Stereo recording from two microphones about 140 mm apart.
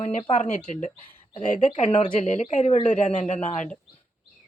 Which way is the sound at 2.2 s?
60° left (ahead or behind).